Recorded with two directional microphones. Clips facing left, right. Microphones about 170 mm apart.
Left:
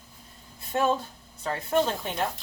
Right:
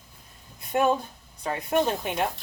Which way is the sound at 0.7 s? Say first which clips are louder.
Right 2 dB; 15° right (ahead or behind).